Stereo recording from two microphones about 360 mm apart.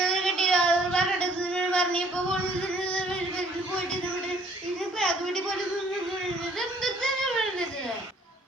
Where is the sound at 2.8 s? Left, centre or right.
Centre.